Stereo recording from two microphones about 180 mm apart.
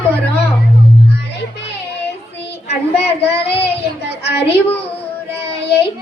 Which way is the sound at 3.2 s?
65° left (ahead or behind).